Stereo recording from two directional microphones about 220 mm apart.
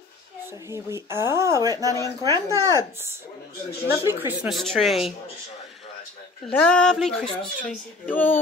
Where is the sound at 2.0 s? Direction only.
15° left (ahead or behind).